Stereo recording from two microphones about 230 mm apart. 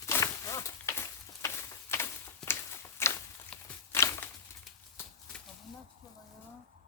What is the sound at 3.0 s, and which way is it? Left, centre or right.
Walk, centre.